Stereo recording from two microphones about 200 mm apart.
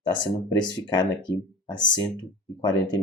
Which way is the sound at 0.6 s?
20° left (ahead or behind).